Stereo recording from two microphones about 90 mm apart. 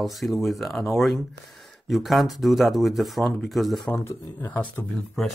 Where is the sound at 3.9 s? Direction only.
20° left (ahead or behind).